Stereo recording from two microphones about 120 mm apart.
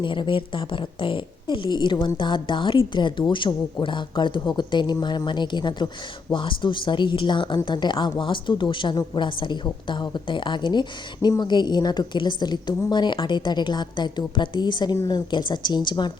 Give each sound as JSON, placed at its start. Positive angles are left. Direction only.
{"t": 0.0, "sound": "a woman's voice", "side_deg": 40}